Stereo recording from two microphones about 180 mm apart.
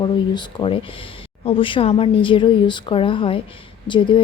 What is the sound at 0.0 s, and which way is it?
A woman's voice, 25° left (ahead or behind).